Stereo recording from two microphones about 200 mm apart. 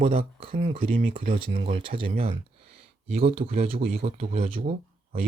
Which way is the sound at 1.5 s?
30° right (ahead or behind).